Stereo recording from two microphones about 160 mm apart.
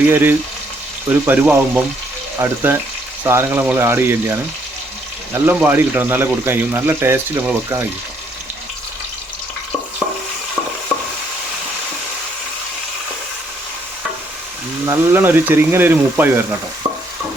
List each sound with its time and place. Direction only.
0.1 s speech: 15° right (ahead or behind)
14.8 s speech: 15° right (ahead or behind)